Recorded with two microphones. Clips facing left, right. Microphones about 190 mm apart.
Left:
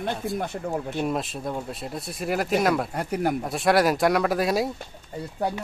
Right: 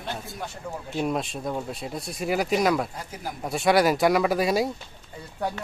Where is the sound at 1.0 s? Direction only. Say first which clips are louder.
Even; centre (ahead or behind).